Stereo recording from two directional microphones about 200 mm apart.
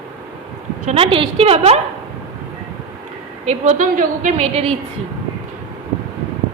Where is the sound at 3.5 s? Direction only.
35° right (ahead or behind).